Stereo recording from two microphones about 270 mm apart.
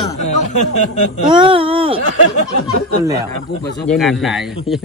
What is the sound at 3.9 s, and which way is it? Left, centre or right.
Speech, centre.